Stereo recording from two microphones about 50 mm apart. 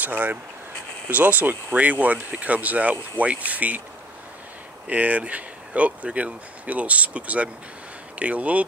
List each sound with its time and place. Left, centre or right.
0.0 s speech: right
4.8 s speech: right